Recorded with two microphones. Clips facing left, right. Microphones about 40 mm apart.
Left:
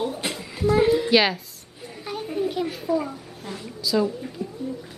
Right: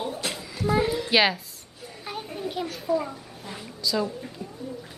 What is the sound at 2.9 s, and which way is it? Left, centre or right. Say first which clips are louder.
A child's voice: right 2 dB; centre.